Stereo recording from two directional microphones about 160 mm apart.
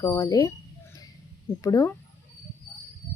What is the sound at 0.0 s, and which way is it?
Speech, 20° left (ahead or behind).